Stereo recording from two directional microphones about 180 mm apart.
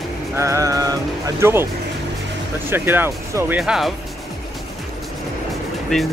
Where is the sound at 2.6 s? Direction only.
10° right (ahead or behind).